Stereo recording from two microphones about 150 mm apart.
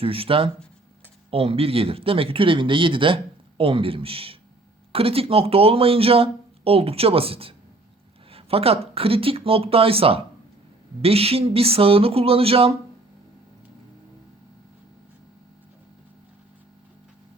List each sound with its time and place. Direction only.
0.0 s speech: 40° right (ahead or behind)